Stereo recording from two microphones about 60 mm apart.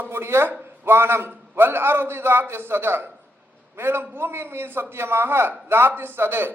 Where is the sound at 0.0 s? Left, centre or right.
Right.